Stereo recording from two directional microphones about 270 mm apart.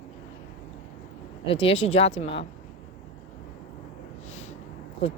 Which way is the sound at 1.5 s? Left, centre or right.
Left.